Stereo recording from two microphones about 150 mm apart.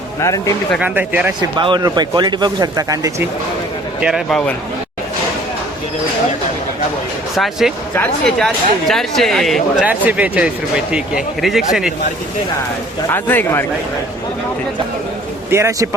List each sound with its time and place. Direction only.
0.2 s speech: 20° left (ahead or behind)
0.8 s a man's voice: 10° right (ahead or behind)
1.4 s speech: 30° right (ahead or behind)
4.0 s speech: centre (ahead or behind)
7.3 s speech: centre (ahead or behind)
9.8 s speech: 10° right (ahead or behind)
13.1 s a man's voice: 15° left (ahead or behind)
15.4 s a man's voice: 20° right (ahead or behind)